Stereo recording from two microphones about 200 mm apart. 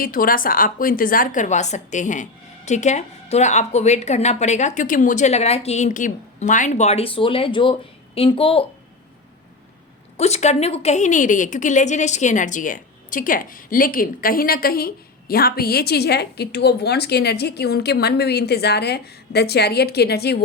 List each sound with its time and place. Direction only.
0.0 s a woman's voice: 45° left (ahead or behind); by 8.6 s 25° left (ahead or behind)
10.2 s a woman's voice: 30° left (ahead or behind); by 20.4 s 55° left (ahead or behind)